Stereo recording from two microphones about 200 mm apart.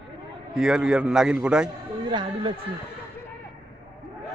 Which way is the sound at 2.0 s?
25° right (ahead or behind).